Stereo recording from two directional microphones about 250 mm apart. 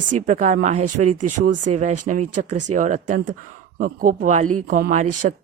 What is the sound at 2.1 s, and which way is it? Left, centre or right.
Speech, right.